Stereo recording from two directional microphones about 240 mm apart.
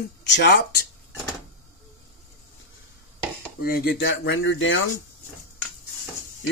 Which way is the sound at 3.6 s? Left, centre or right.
Left.